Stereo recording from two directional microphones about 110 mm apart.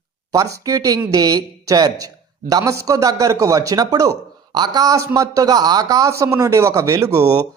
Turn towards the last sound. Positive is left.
turn(degrees=-30)  # may be behind; listen again after turning